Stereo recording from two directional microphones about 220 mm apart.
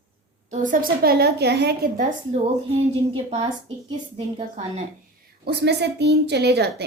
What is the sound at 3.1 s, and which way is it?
Speech, 25° right (ahead or behind).